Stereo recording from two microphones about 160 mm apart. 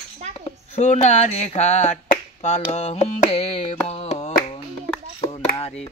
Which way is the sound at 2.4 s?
40° left (ahead or behind).